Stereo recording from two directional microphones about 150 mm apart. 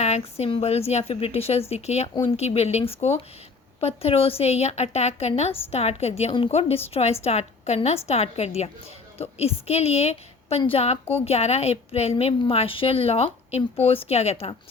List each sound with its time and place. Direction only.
0.0 s a woman's voice: 45° left (ahead or behind)